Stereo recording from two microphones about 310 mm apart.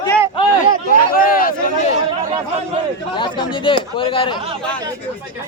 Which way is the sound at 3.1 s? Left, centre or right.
Centre.